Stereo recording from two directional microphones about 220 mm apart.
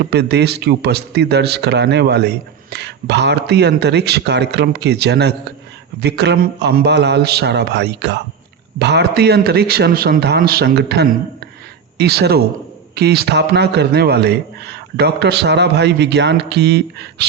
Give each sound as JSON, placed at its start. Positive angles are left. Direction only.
{"t": 0.0, "sound": "a man's voice", "side_deg": -50}